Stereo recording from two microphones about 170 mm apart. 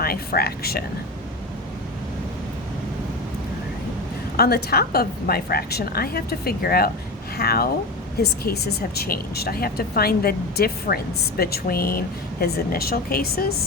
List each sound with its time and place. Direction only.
0.0 s speech: 65° left (ahead or behind)
4.4 s speech: 65° left (ahead or behind)